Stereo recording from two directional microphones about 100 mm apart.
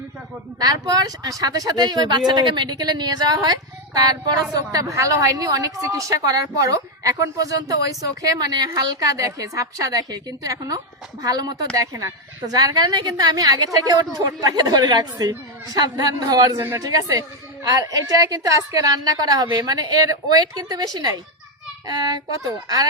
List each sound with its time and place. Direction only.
0.6 s a woman's voice: 40° right (ahead or behind)